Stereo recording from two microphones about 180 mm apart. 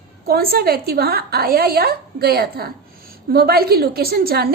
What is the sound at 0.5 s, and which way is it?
A woman's voice, 60° right (ahead or behind).